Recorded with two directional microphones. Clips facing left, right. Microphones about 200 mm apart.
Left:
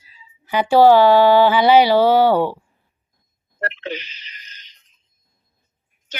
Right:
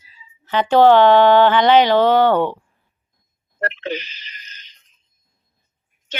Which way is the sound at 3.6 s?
40° right (ahead or behind).